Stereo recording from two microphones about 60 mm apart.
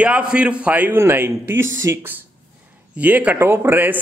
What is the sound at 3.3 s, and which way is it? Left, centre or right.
Speech, right.